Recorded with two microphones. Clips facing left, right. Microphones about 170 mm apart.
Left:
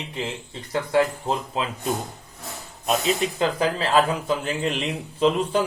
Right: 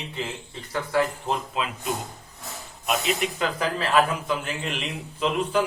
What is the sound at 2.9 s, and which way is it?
Speech, 35° left (ahead or behind).